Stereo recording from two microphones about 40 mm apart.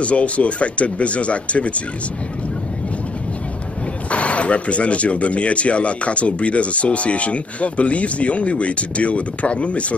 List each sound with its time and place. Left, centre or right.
0.0 s speech: left
4.1 s speech: left